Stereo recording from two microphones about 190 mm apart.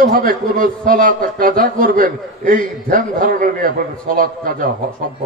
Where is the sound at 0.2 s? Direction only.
45° right (ahead or behind).